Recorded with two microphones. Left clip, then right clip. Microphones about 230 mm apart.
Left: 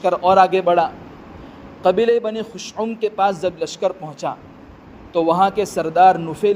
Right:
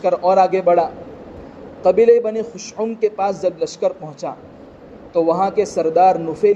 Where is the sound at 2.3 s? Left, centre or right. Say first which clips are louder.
Right 2 dB; left.